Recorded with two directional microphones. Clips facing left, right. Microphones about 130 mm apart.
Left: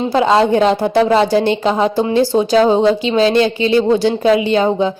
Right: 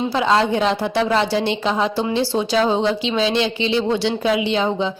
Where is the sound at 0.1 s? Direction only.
40° left (ahead or behind).